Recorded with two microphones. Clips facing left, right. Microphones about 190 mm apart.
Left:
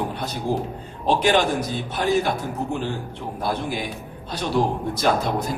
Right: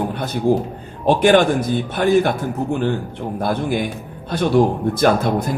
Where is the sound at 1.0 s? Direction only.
55° right (ahead or behind).